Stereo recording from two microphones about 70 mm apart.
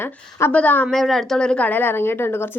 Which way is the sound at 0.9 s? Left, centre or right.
Centre.